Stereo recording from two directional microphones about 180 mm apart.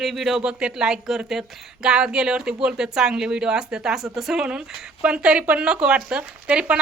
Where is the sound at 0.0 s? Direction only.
Centre (ahead or behind).